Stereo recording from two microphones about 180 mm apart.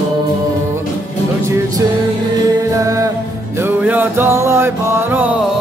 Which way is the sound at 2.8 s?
20° right (ahead or behind).